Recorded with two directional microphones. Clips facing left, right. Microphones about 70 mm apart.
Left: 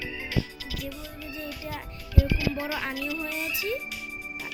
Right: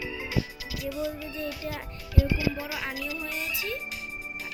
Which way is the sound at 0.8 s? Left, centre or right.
Centre.